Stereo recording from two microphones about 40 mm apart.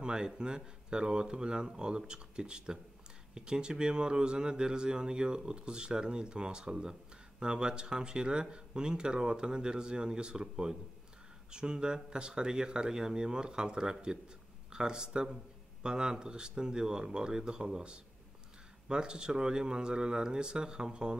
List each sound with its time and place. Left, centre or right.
0.0 s speech: right